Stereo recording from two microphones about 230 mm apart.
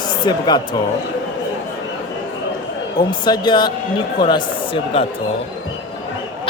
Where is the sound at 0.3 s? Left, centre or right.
Centre.